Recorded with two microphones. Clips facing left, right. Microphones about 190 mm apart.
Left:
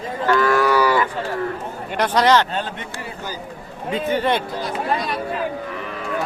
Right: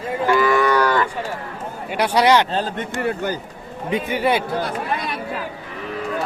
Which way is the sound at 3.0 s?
60° right (ahead or behind).